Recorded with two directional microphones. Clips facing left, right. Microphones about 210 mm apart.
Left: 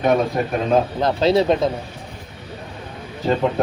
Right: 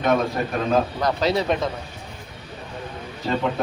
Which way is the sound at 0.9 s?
25° left (ahead or behind).